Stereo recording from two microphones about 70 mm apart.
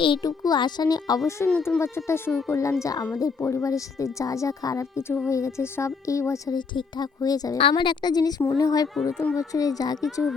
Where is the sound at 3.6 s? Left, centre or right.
Left.